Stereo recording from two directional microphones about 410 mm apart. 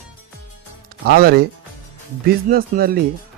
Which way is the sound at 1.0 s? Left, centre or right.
Right.